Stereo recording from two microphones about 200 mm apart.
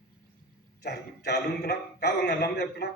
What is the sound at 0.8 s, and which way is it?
A man's voice, 55° left (ahead or behind).